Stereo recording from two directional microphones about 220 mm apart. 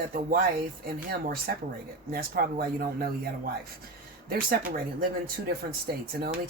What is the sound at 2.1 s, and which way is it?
Speech, 40° right (ahead or behind).